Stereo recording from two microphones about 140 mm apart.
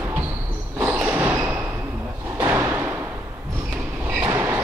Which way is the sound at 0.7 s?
20° right (ahead or behind).